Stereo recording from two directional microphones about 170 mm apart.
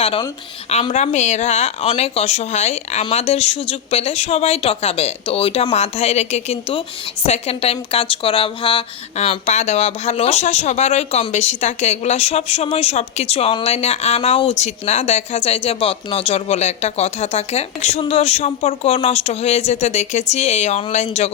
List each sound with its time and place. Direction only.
0.7 s speech: 40° left (ahead or behind)
9.2 s speech: 40° left (ahead or behind)